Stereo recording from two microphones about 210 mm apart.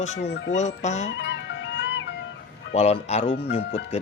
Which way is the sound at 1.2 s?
55° left (ahead or behind).